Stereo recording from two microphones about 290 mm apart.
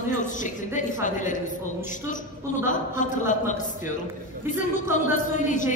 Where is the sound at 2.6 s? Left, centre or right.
Left.